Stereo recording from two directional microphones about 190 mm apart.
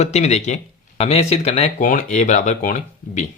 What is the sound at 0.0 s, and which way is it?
Speech, 35° left (ahead or behind).